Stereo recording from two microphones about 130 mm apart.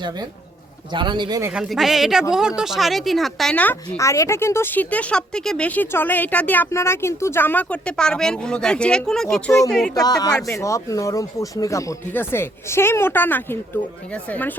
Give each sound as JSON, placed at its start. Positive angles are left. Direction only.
{"t": 0.9, "sound": "speech", "side_deg": -35}
{"t": 1.5, "sound": "speech", "side_deg": 0}
{"t": 3.8, "sound": "speech", "side_deg": 25}
{"t": 9.9, "sound": "speech", "side_deg": 30}